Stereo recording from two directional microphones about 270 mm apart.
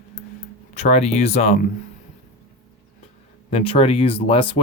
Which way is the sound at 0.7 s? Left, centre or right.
Left.